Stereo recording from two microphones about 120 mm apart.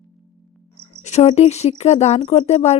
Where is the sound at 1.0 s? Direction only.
65° left (ahead or behind).